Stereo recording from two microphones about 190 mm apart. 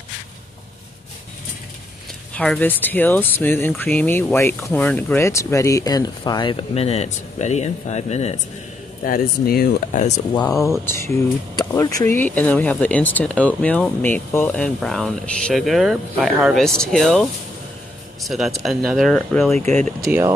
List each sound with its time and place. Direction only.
2.3 s speech: 5° left (ahead or behind); by 8.4 s 35° left (ahead or behind)
9.0 s speech: 50° left (ahead or behind)
10.9 s speech: 15° left (ahead or behind)
20.0 s speech: 15° right (ahead or behind)